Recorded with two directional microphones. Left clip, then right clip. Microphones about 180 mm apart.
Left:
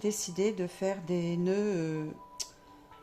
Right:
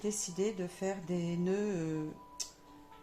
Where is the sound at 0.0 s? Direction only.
50° left (ahead or behind).